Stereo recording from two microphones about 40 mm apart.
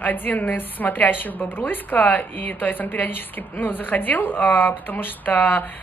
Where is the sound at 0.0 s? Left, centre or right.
Left.